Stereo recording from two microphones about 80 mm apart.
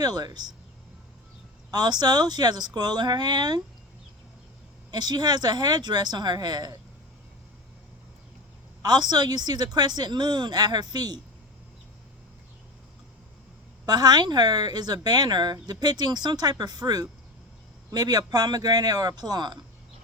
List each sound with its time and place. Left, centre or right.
0.0 s speech: right
1.7 s speech: right
4.9 s speech: right
8.8 s speech: right
13.8 s speech: right